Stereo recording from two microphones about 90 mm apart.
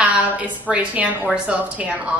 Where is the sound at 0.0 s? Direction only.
15° right (ahead or behind).